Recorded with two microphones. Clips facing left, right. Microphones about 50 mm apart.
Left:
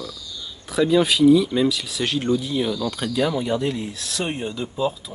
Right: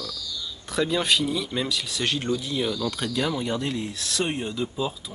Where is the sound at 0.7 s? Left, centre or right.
Centre.